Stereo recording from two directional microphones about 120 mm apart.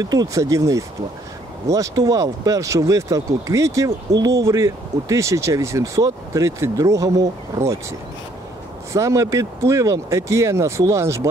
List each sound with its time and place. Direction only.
0.0 s speech: 35° right (ahead or behind)
8.9 s speech: 25° right (ahead or behind)